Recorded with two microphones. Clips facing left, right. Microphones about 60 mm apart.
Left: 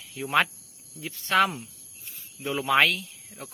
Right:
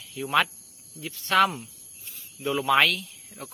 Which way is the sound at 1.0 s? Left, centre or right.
Centre.